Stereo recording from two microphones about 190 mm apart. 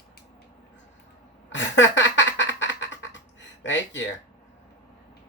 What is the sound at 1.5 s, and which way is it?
Quack, 70° left (ahead or behind).